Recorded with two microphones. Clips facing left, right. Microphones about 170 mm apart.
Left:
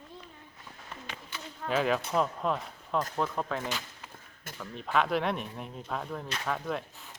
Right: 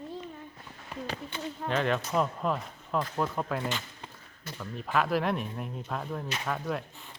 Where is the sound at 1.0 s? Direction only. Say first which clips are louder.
Right 9 dB; 35° right (ahead or behind).